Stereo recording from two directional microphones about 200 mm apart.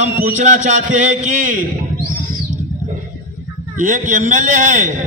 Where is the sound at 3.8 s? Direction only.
40° right (ahead or behind).